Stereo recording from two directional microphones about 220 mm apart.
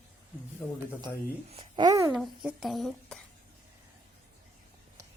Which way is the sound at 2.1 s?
Centre (ahead or behind).